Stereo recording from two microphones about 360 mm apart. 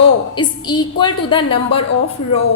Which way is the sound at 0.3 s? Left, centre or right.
Centre.